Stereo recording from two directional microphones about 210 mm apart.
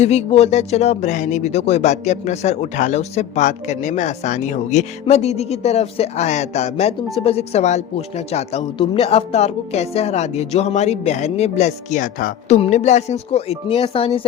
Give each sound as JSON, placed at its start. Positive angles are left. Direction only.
{"t": 0.0, "sound": "speech", "side_deg": 30}